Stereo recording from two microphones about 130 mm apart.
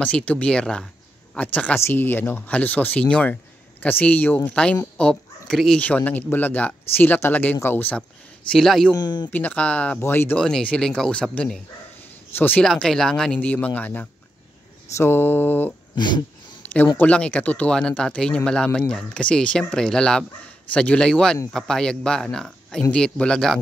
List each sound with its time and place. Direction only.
0.0 s speech: 10° left (ahead or behind)
8.5 s speech: centre (ahead or behind)
8.9 s speech: 35° left (ahead or behind)
9.3 s speech: 10° left (ahead or behind)
10.4 s speech: 5° left (ahead or behind)
16.7 s speech: 15° left (ahead or behind)